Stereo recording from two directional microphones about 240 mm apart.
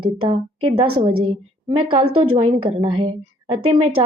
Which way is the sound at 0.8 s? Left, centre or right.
Right.